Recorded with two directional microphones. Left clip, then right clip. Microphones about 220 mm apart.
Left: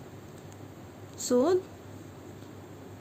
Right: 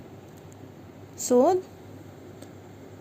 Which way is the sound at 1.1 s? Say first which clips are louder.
Right 5 dB; 20° right (ahead or behind).